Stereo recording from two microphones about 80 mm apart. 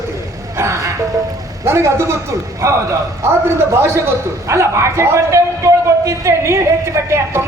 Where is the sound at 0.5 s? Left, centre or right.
Right.